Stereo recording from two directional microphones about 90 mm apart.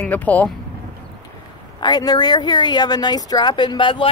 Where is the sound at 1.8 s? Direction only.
45° left (ahead or behind).